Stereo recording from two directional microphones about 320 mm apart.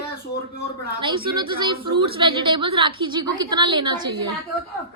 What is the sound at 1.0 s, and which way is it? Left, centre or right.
A woman's voice, centre.